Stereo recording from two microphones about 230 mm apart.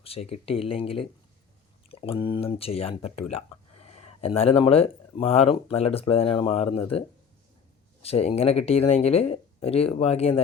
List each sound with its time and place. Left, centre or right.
0.0 s speech: left
8.0 s speech: left